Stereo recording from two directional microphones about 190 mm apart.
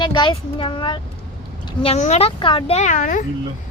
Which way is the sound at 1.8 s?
35° left (ahead or behind).